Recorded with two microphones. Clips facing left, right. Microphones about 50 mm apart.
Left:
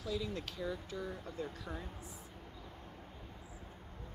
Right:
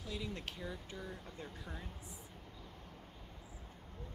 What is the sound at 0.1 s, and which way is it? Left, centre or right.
Speech, centre.